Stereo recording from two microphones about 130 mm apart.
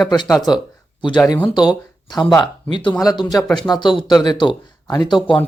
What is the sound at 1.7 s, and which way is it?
Speech, 35° left (ahead or behind).